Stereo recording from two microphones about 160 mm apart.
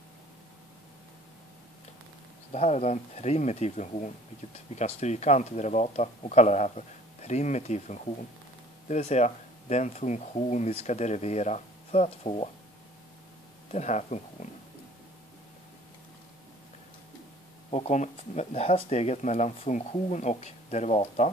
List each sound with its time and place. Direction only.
2.5 s speech: 45° left (ahead or behind)
13.7 s speech: 45° left (ahead or behind)
17.6 s speech: 45° left (ahead or behind)